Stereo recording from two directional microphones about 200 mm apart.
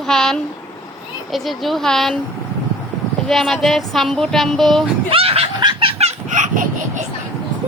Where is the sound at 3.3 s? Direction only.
Centre (ahead or behind).